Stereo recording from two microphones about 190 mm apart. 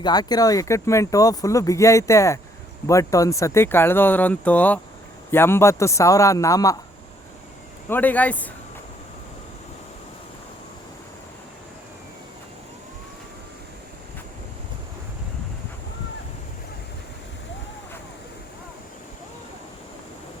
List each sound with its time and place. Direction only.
0.0 s speech: 20° left (ahead or behind)
7.9 s speech: 10° left (ahead or behind)